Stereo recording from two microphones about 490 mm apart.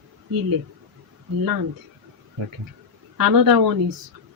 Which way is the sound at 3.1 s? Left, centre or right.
Right.